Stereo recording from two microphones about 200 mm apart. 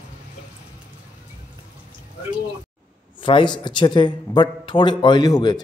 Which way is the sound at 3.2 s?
25° left (ahead or behind).